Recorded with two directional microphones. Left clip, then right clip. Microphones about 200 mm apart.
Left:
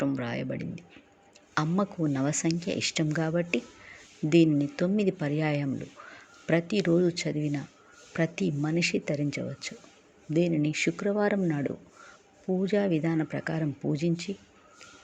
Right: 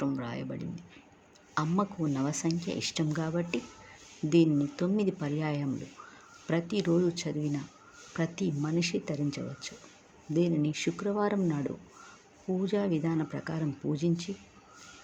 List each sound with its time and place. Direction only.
0.0 s speech: 15° left (ahead or behind)